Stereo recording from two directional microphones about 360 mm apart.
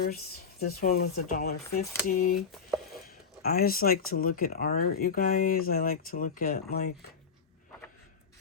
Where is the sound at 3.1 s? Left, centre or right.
Left.